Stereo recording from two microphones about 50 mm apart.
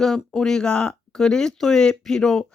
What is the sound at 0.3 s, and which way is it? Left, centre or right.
Speech, centre.